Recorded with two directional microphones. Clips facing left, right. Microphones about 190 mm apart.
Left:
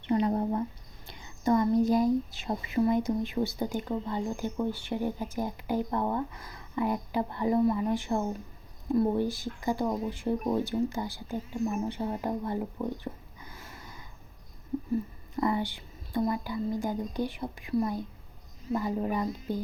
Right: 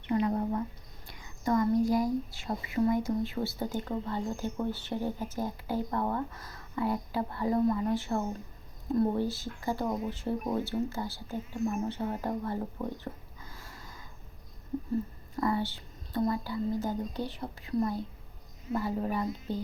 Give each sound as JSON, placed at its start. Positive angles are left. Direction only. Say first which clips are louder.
{"t": 0.0, "sound": "a sound", "louder": "left 2 dB", "side_deg": 30}
{"t": 1.0, "sound": "speech", "louder": "left 4 dB", "side_deg": 25}
{"t": 13.4, "sound": "snort", "louder": "left 2 dB", "side_deg": 20}
{"t": 15.4, "sound": "speech", "louder": "left 1 dB", "side_deg": 20}